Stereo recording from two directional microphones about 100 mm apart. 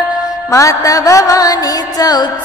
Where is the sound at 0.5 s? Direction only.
30° left (ahead or behind).